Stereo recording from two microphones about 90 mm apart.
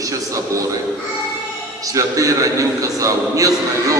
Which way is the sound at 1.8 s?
40° right (ahead or behind).